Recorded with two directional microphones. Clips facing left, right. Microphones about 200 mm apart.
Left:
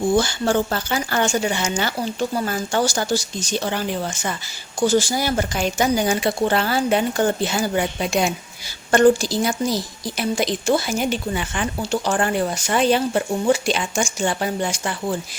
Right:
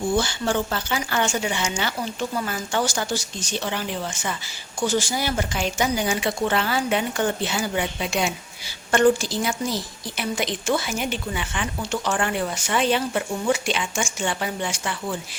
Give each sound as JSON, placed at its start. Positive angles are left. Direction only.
{"t": 0.2, "sound": "speech", "side_deg": 40}